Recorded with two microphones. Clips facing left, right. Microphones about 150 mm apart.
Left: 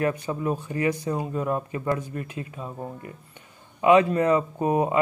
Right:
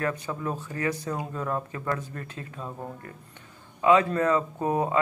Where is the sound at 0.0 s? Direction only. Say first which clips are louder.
Left 4 dB; 15° left (ahead or behind).